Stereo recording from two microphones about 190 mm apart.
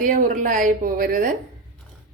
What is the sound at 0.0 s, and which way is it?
A woman's voice, 45° right (ahead or behind).